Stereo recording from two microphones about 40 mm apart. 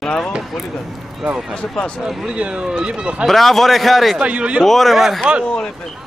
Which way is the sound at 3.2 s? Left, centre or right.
Centre.